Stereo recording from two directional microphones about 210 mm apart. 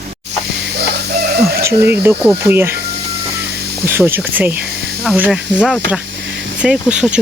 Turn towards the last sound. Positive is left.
turn(degrees=-5)  # may be behind; listen again after turning